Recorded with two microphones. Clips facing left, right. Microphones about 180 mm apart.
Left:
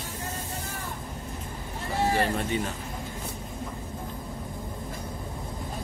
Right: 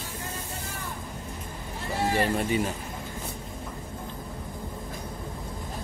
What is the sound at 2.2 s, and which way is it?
Speech, 5° right (ahead or behind).